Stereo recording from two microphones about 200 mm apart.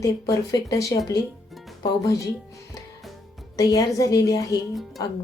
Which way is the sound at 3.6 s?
15° left (ahead or behind).